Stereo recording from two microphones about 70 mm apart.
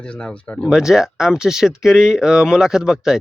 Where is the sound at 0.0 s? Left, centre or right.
Centre.